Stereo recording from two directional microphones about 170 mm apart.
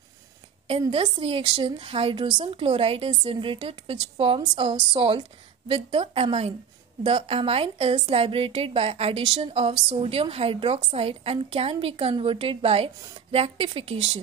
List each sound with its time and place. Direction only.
0.7 s a woman's voice: 30° right (ahead or behind)